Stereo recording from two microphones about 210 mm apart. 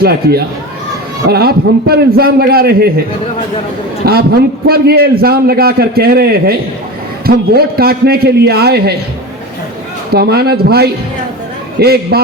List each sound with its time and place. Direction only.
0.0 s a man's voice: 50° right (ahead or behind)
4.0 s a man's voice: 45° right (ahead or behind)
10.1 s a man's voice: 50° right (ahead or behind)